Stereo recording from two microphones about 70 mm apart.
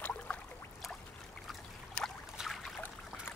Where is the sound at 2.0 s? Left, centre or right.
Centre.